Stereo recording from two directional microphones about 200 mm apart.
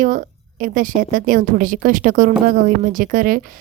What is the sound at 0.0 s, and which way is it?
A woman's voice, 40° right (ahead or behind).